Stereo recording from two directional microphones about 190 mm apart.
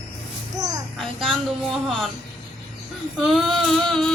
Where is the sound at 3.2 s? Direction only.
Centre (ahead or behind).